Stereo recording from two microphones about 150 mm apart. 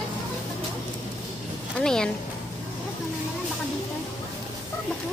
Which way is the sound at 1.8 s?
5° left (ahead or behind).